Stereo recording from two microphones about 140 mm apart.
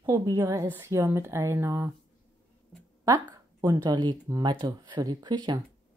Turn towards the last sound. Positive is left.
turn(degrees=-30)  # may be behind; listen again after turning